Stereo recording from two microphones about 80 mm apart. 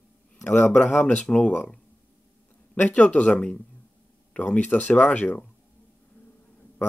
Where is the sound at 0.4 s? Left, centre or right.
Left.